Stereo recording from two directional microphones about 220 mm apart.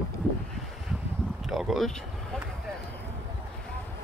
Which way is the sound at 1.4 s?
Centre (ahead or behind).